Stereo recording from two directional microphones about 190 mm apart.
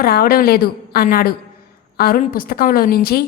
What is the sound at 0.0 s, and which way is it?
A woman's voice, 50° left (ahead or behind).